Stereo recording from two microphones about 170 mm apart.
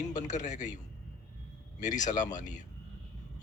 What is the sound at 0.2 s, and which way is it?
Speech, 45° left (ahead or behind).